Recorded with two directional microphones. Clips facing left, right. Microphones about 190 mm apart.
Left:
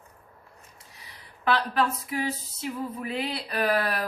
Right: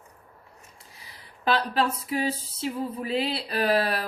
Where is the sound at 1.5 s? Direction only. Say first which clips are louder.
Right 1 dB; 30° right (ahead or behind).